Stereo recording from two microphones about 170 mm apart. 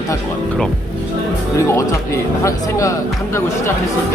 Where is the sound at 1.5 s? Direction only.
15° left (ahead or behind).